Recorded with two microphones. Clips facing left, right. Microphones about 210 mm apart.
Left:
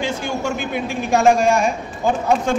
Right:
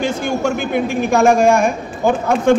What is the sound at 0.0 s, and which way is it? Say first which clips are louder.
A man's voice: right 5 dB; 50° right (ahead or behind).